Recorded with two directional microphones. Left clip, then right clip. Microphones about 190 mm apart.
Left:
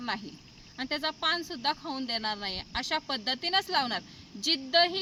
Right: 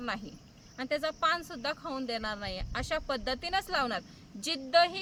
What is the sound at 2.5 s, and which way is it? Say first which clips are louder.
Speech: left 3 dB; 55° right (ahead or behind).